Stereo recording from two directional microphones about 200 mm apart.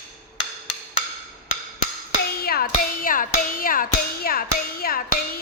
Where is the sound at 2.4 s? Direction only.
50° left (ahead or behind).